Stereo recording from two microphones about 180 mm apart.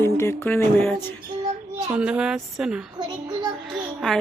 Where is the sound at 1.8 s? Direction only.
5° right (ahead or behind).